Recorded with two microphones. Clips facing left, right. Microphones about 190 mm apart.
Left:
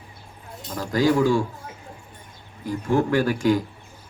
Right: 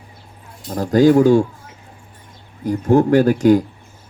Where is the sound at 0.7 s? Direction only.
40° right (ahead or behind).